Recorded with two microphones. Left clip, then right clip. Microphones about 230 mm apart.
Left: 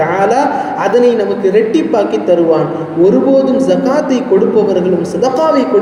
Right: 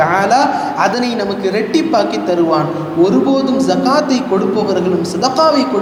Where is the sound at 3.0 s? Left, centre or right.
Right.